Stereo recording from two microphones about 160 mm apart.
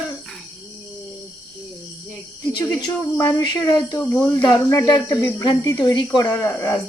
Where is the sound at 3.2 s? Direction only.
20° left (ahead or behind).